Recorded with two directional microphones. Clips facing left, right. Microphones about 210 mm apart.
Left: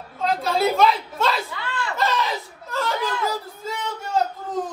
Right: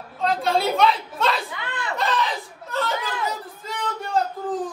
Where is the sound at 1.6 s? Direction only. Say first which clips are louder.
Left 2 dB; 20° right (ahead or behind).